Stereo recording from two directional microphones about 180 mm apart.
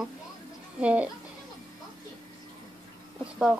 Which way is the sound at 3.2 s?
5° right (ahead or behind).